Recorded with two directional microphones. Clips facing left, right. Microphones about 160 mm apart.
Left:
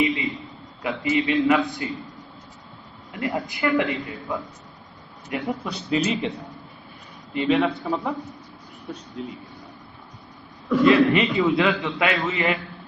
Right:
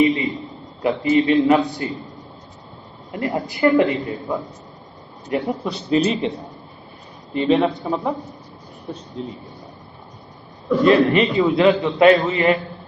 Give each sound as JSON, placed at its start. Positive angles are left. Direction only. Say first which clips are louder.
{"t": 0.0, "sound": "a sound", "louder": "right 6 dB", "side_deg": -40}
{"t": 0.8, "sound": "a man's voice", "louder": "right 6 dB", "side_deg": -35}
{"t": 3.1, "sound": "a man's voice", "louder": "right 3 dB", "side_deg": -40}
{"t": 7.3, "sound": "a man's voice", "louder": "right 4 dB", "side_deg": -30}
{"t": 10.7, "sound": "a man's voice", "louder": "right 2 dB", "side_deg": -35}